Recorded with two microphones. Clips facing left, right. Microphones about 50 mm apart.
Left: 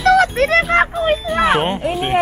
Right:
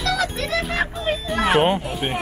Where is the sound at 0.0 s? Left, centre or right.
Left.